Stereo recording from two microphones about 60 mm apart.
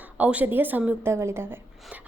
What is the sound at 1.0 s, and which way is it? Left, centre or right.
Speech, right.